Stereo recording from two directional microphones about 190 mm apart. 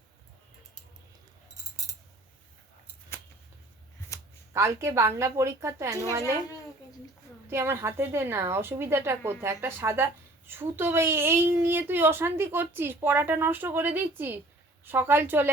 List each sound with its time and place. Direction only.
4.1 s a sound: 15° left (ahead or behind)
4.5 s a woman's voice: 15° right (ahead or behind)
7.5 s a woman's voice: 15° right (ahead or behind)